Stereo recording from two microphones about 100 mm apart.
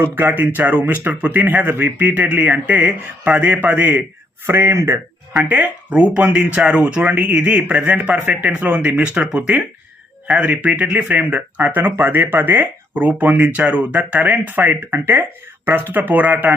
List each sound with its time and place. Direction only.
0.0 s speech: 20° right (ahead or behind)
5.3 s speech: 10° right (ahead or behind)